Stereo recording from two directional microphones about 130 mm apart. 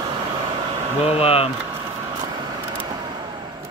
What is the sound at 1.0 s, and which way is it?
Speech, 50° left (ahead or behind).